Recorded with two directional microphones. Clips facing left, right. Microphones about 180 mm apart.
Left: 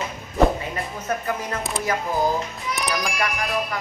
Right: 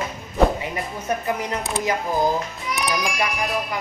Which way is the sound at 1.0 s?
15° right (ahead or behind).